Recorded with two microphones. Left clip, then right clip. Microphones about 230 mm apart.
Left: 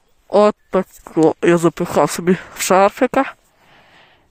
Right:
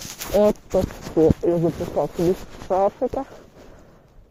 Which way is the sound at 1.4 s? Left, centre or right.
Left.